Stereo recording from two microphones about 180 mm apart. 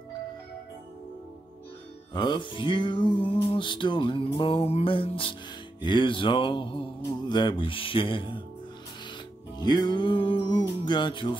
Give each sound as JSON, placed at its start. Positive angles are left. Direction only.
{"t": 2.1, "sound": "music", "side_deg": 25}
{"t": 9.6, "sound": "music", "side_deg": 25}